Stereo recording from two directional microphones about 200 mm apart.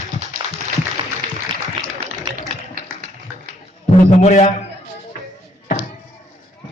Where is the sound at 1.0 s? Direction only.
25° right (ahead or behind).